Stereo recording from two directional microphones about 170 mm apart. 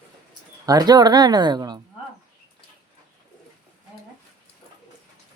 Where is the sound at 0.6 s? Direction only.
20° right (ahead or behind).